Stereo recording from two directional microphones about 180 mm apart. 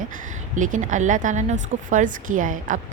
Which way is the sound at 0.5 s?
45° right (ahead or behind).